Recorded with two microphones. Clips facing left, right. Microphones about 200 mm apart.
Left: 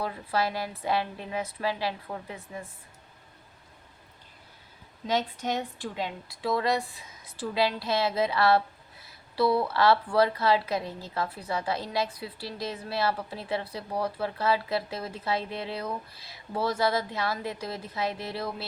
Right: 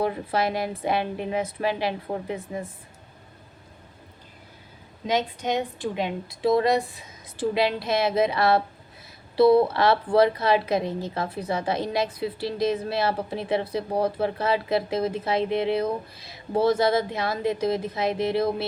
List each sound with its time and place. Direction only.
0.0 s a woman's voice: 20° right (ahead or behind)
5.0 s a woman's voice: 15° right (ahead or behind)